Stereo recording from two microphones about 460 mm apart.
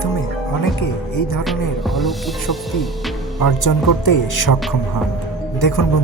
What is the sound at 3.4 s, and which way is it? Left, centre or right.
A man's voice, left.